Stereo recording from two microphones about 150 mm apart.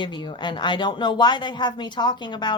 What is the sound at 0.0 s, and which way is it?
Speech, 30° left (ahead or behind).